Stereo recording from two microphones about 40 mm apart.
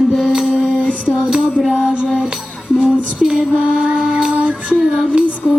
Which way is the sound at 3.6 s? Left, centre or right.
Right.